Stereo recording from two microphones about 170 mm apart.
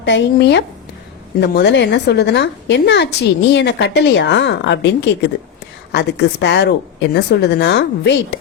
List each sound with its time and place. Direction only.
0.0 s a woman's voice: 90° left
5.9 s a woman's voice: 80° left